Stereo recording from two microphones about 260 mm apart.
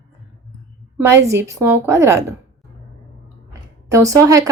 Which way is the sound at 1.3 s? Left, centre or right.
Centre.